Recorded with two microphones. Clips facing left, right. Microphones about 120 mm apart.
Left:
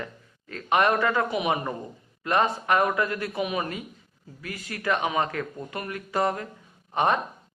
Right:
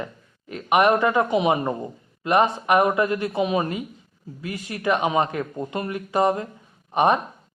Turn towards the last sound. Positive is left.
turn(degrees=-15)  # may be behind; listen again after turning